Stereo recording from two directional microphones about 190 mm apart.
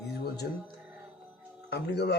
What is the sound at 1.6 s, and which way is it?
Speech, 60° left (ahead or behind).